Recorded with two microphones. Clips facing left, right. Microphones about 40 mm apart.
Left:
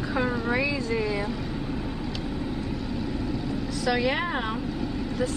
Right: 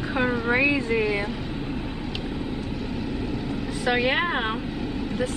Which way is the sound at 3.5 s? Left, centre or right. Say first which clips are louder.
Right 2 dB; right.